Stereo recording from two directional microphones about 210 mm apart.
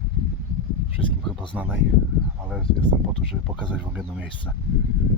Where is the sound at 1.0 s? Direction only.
25° left (ahead or behind).